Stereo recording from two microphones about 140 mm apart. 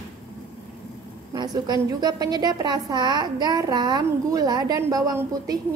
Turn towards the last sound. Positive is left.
turn(degrees=-25)  # may be behind; listen again after turning